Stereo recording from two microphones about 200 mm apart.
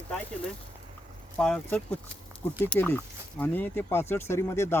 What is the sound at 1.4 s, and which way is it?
Speech, 5° left (ahead or behind).